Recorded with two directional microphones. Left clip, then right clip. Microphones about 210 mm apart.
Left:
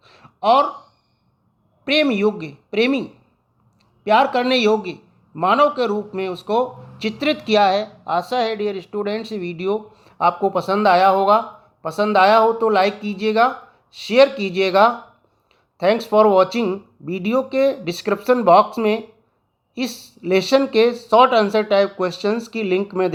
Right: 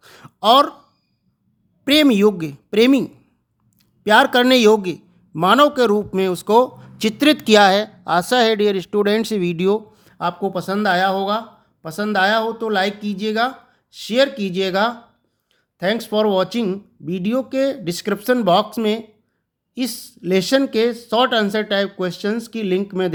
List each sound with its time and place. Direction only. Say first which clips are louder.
0.0 s a sound: right 2 dB; 45° right (ahead or behind)
1.8 s a man's voice: right 3 dB; 45° right (ahead or behind)
4.0 s a man's voice: right 3 dB; 45° right (ahead or behind)
10.0 s speech: left 5 dB; 25° right (ahead or behind)